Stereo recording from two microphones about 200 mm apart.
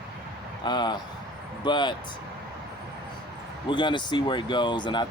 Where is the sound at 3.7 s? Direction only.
25° left (ahead or behind).